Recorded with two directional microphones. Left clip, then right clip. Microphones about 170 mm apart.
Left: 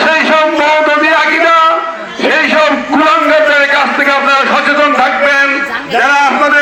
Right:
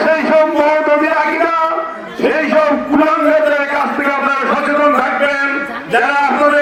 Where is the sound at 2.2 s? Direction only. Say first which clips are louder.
Left 3 dB; 20° left (ahead or behind).